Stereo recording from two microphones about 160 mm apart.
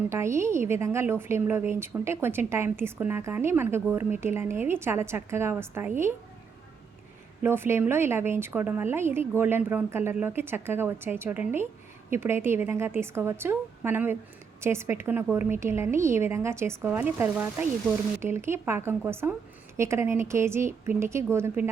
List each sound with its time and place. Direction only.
0.1 s a woman's voice: 15° right (ahead or behind)
7.4 s a woman's voice: 15° right (ahead or behind)